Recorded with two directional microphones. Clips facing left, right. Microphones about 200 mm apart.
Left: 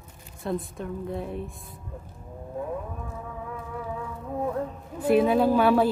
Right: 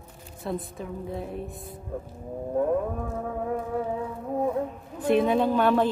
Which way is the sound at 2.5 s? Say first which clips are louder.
Right 8 dB; 55° right (ahead or behind).